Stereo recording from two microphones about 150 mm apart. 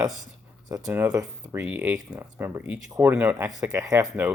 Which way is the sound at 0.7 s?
20° right (ahead or behind).